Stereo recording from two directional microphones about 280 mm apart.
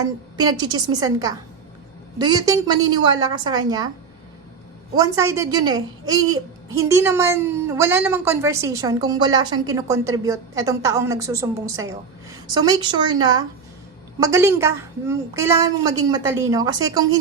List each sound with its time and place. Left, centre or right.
0.0 s a woman's voice: centre
4.9 s a woman's voice: centre